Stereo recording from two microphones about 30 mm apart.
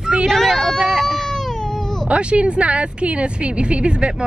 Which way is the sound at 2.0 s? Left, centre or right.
Right.